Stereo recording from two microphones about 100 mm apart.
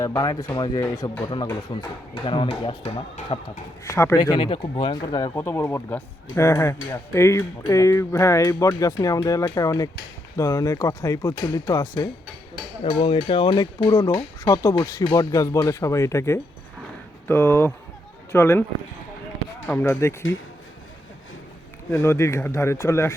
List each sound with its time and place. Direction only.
0.2 s speech: 40° left (ahead or behind); by 3.3 s 65° left (ahead or behind)
3.8 s speech: 30° left (ahead or behind)
4.2 s speech: 55° left (ahead or behind)
4.7 s speech: 45° left (ahead or behind)
5.3 s speech: 25° left (ahead or behind)
12.8 s speech: 70° left (ahead or behind)
13.6 s speech: 35° left (ahead or behind)
19.8 s speech: 25° left (ahead or behind)
21.9 s speech: 30° left (ahead or behind)